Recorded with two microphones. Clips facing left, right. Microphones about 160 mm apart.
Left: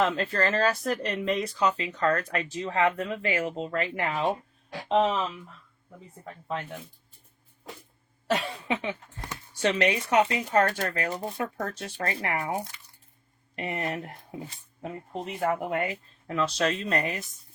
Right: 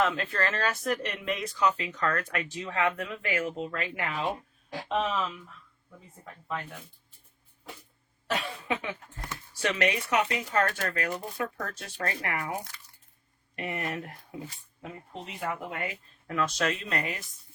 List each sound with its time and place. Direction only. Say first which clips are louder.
0.0 s speech: left 2 dB; 35° left (ahead or behind)
8.6 s speech: left 2 dB; 25° left (ahead or behind)
14.8 s speech: left 6 dB; 45° left (ahead or behind)
16.2 s speech: left 2 dB; 25° left (ahead or behind)